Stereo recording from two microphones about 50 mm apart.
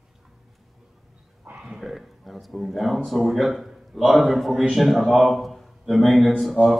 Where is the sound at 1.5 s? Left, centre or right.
Centre.